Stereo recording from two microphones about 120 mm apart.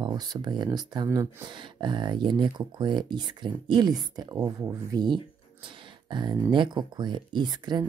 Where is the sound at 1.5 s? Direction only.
40° right (ahead or behind).